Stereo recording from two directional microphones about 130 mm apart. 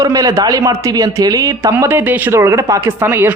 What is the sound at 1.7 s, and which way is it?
Speech, 15° right (ahead or behind).